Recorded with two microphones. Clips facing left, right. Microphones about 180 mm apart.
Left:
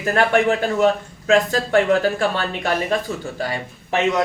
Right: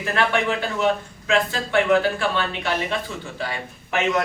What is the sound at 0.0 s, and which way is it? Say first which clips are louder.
Speech: left 5 dB; 40° left (ahead or behind).